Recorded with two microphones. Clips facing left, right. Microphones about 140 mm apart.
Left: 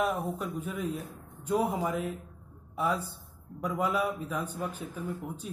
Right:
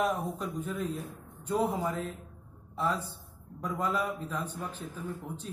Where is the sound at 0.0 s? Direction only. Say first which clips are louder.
Even; centre (ahead or behind).